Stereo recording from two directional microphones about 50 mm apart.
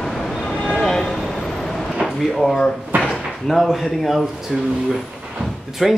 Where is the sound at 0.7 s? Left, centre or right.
Centre.